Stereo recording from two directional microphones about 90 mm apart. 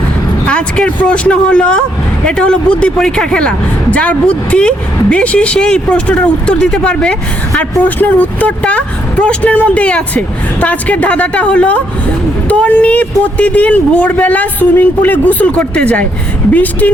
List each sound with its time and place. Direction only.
0.4 s speech: 10° left (ahead or behind)